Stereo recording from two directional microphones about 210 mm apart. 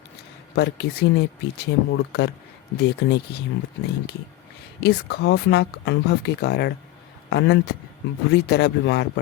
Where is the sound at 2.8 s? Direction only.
50° left (ahead or behind).